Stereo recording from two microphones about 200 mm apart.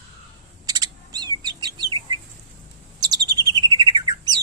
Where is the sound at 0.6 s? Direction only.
20° right (ahead or behind).